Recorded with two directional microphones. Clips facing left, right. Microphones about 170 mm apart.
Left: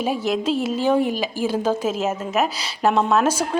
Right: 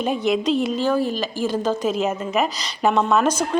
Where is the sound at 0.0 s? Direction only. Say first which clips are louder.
Right 1 dB; 5° left (ahead or behind).